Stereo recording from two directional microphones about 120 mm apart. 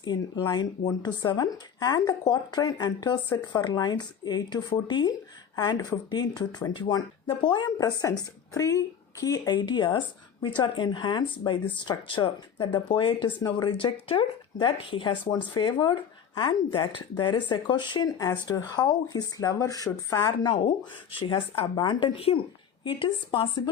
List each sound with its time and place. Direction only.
0.0 s speech: 35° left (ahead or behind)